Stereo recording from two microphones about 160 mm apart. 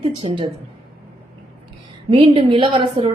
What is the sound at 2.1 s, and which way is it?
A woman's voice, 35° right (ahead or behind).